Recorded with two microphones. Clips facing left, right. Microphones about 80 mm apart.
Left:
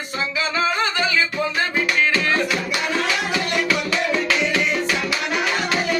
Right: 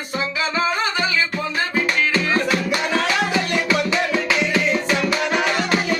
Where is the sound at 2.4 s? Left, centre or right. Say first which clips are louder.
Right 2 dB; right.